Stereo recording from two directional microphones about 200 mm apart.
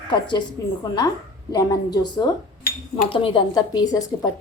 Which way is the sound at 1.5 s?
20° left (ahead or behind).